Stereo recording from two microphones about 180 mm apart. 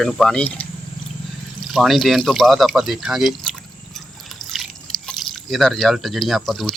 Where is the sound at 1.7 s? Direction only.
Centre (ahead or behind).